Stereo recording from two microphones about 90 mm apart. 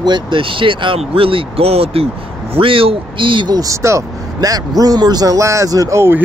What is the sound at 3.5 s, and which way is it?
Speech, 40° right (ahead or behind).